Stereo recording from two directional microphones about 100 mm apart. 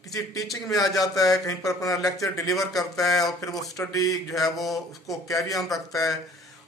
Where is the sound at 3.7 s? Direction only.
35° left (ahead or behind).